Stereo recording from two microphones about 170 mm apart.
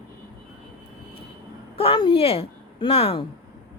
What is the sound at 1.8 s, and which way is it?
A woman's voice, 30° left (ahead or behind).